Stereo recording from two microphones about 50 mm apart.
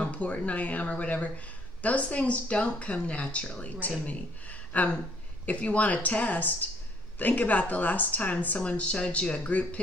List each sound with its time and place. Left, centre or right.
0.0 s speech: left